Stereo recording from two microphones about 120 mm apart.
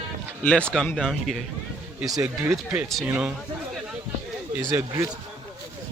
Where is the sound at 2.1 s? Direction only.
25° right (ahead or behind).